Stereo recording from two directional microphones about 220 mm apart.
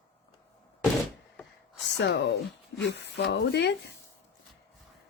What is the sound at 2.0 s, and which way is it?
Speech, 50° left (ahead or behind).